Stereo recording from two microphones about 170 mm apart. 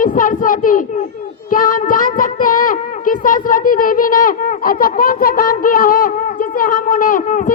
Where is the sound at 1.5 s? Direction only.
55° left (ahead or behind).